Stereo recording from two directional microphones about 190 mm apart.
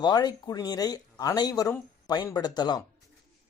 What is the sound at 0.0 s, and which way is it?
Speech, 20° left (ahead or behind).